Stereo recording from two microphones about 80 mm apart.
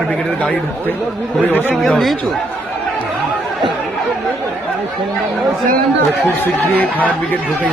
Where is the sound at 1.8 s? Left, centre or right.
Centre.